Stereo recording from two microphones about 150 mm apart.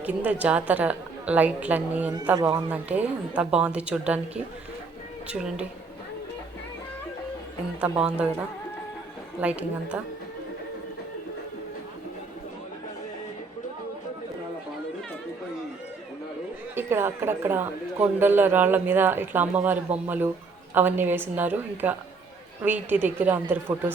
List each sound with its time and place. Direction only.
0.0 s speech: 10° right (ahead or behind)
2.6 s speech: 10° right (ahead or behind)
5.3 s speech: 5° right (ahead or behind)
7.8 s speech: 5° right (ahead or behind)
9.4 s speech: 10° right (ahead or behind)
16.7 s speech: 15° right (ahead or behind)